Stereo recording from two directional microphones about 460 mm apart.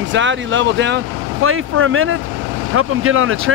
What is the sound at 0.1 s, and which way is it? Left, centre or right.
Speech, right.